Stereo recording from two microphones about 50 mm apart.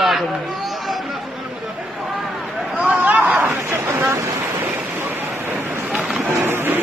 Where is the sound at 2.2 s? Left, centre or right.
Centre.